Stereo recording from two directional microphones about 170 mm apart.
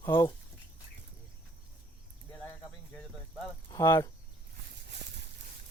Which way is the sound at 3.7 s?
20° left (ahead or behind).